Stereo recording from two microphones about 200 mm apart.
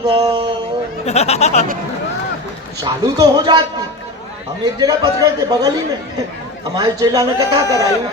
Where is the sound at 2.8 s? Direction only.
20° right (ahead or behind).